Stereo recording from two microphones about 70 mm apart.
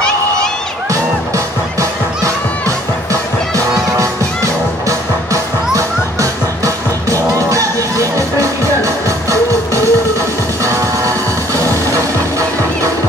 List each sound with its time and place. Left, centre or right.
3.1 s music: right
11.9 s music: right